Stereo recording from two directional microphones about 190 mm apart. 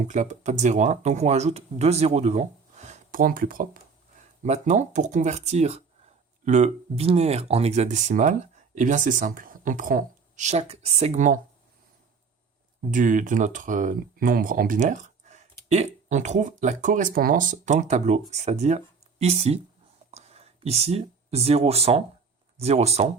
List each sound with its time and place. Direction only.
0.1 s speech: 40° right (ahead or behind)
12.9 s speech: 40° right (ahead or behind)